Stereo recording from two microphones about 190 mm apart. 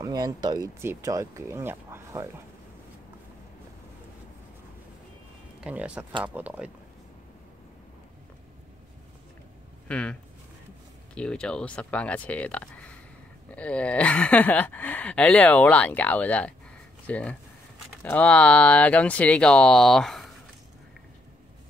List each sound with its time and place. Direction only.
0.0 s speech: 20° right (ahead or behind)
5.6 s speech: 5° right (ahead or behind)
9.8 s speech: 5° left (ahead or behind)
11.1 s speech: 5° left (ahead or behind)